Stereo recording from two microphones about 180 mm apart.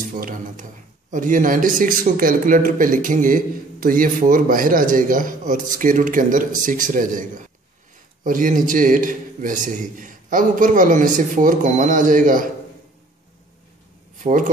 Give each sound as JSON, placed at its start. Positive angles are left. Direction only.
{"t": 0.1, "sound": "speech", "side_deg": -50}
{"t": 14.2, "sound": "speech", "side_deg": -45}